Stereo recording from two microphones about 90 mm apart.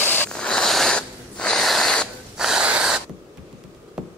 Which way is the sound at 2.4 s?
5° right (ahead or behind).